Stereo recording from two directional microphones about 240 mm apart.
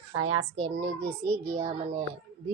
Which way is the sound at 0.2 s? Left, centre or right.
Right.